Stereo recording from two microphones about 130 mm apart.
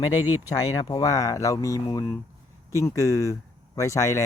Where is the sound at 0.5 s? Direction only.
30° left (ahead or behind).